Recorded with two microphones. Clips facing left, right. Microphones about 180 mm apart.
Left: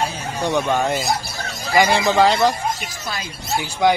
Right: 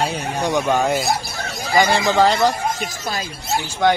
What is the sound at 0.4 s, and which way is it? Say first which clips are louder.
Speech: right 1 dB; 10° right (ahead or behind).